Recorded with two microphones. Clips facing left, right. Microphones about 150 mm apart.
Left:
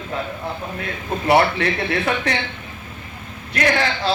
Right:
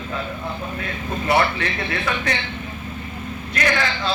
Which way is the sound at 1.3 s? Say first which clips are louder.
Left 4 dB; 40° left (ahead or behind).